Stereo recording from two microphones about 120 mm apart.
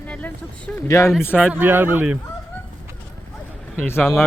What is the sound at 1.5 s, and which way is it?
Speech, 15° right (ahead or behind).